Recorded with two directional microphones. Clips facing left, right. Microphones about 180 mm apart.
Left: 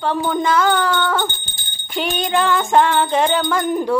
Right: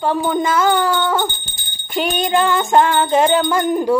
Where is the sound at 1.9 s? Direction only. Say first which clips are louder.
Right 2 dB; 5° right (ahead or behind).